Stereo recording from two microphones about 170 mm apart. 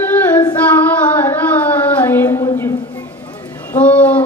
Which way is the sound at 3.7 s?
10° left (ahead or behind).